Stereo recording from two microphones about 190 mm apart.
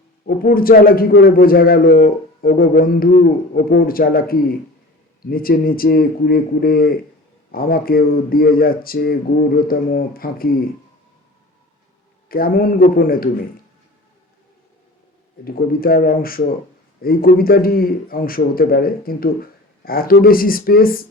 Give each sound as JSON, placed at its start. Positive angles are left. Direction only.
{"t": 0.3, "sound": "a man's voice", "side_deg": 50}
{"t": 12.3, "sound": "a man's voice", "side_deg": 50}
{"t": 15.4, "sound": "a man's voice", "side_deg": 50}